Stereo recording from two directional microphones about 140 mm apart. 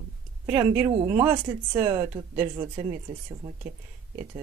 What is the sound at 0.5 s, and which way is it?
Speech, 15° right (ahead or behind).